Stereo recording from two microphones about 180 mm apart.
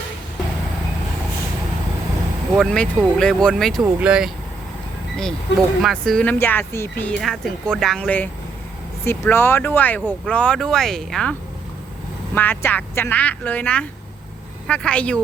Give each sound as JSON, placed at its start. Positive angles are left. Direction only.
{"t": 2.6, "sound": "speech", "side_deg": 5}
{"t": 5.5, "sound": "speech", "side_deg": 80}
{"t": 5.8, "sound": "speech", "side_deg": 5}